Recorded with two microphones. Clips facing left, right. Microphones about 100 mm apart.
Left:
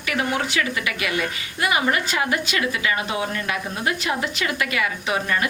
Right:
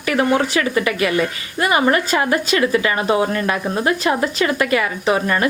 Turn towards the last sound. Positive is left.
turn(degrees=-40)  # may be behind; listen again after turning